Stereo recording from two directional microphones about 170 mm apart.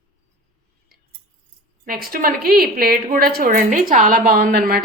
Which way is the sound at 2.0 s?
60° right (ahead or behind).